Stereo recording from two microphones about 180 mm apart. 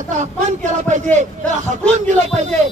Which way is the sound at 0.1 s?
40° right (ahead or behind).